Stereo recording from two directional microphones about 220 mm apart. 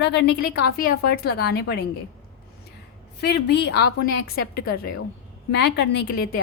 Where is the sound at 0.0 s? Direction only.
50° left (ahead or behind).